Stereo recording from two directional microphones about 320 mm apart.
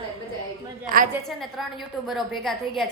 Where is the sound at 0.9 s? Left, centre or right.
Right.